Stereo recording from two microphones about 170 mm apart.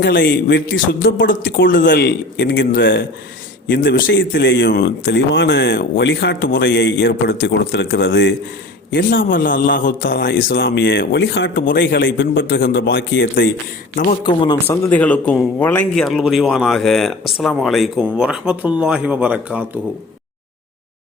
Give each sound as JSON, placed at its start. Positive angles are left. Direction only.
{"t": 0.0, "sound": "speech", "side_deg": 75}
{"t": 2.0, "sound": "speech", "side_deg": 70}
{"t": 3.7, "sound": "speech", "side_deg": 70}
{"t": 8.9, "sound": "speech", "side_deg": 60}
{"t": 9.5, "sound": "speech", "side_deg": 55}
{"t": 13.9, "sound": "speech", "side_deg": 55}
{"t": 14.3, "sound": "speech", "side_deg": 25}
{"t": 14.8, "sound": "a man's voice", "side_deg": 10}
{"t": 16.0, "sound": "speech", "side_deg": 0}